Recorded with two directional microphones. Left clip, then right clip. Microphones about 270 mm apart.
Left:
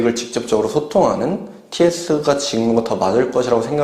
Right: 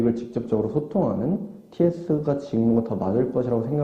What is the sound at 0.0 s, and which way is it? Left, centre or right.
Speech, centre.